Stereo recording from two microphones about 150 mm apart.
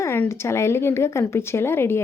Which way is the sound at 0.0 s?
15° left (ahead or behind).